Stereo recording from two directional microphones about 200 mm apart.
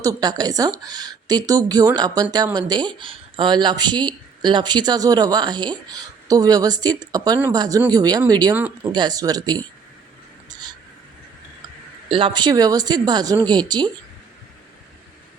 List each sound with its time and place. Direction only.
0.0 s speech: 20° right (ahead or behind)
8.5 s speech: 10° right (ahead or behind)
8.9 s speech: 20° right (ahead or behind)
12.0 s speech: 25° right (ahead or behind)